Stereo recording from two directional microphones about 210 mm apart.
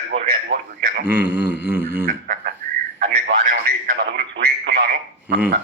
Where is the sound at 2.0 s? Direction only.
45° right (ahead or behind).